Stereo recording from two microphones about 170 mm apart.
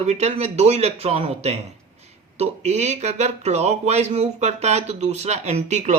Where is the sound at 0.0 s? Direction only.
40° right (ahead or behind).